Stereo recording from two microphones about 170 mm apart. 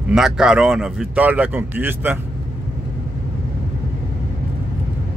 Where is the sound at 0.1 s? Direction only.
5° right (ahead or behind).